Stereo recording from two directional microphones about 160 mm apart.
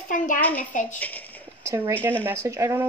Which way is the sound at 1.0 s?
10° left (ahead or behind).